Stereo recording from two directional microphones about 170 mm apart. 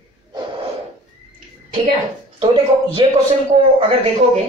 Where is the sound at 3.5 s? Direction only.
40° right (ahead or behind).